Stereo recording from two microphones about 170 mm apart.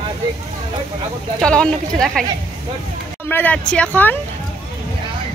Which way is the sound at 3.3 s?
10° left (ahead or behind).